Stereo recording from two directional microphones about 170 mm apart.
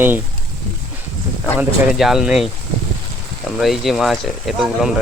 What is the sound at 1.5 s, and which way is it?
Speech, 5° right (ahead or behind).